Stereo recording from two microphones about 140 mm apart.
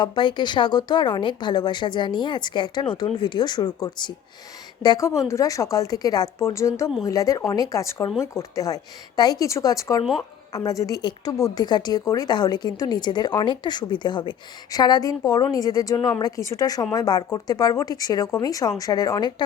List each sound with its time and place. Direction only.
0.0 s a woman's voice: 35° left (ahead or behind)